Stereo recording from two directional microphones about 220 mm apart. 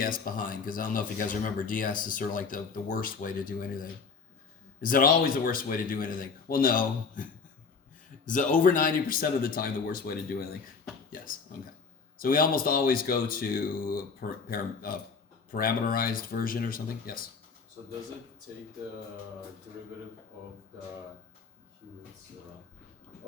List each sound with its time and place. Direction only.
0.0 s speech: 40° left (ahead or behind)
12.2 s speech: 40° left (ahead or behind)